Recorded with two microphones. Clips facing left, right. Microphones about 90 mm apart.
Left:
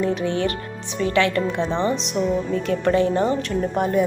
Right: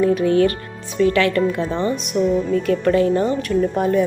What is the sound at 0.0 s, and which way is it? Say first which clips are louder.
Speech: right 6 dB; 25° left (ahead or behind).